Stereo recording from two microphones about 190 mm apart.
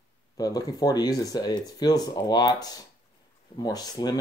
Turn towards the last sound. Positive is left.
turn(degrees=20)  # may be behind; listen again after turning